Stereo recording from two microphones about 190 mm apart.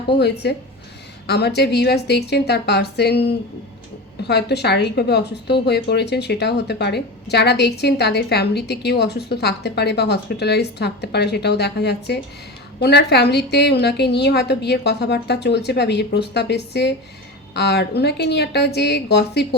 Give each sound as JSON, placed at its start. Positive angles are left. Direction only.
{"t": 0.1, "sound": "a woman's voice", "side_deg": 60}